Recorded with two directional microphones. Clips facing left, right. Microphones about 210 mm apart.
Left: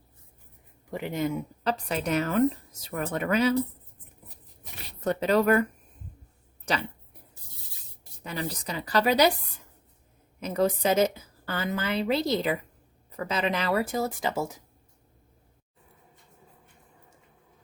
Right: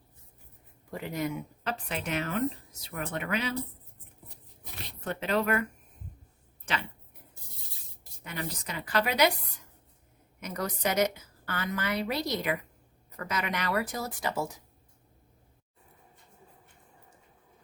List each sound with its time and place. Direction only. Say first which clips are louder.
0.9 s speech: left 4 dB; 20° left (ahead or behind)
1.7 s a woman's voice: left 6 dB; 40° left (ahead or behind)
5.0 s a woman's voice: left 6 dB; 40° left (ahead or behind)
8.2 s a woman's voice: left 4 dB; 35° left (ahead or behind)
10.4 s a woman's voice: left 7 dB; 25° left (ahead or behind)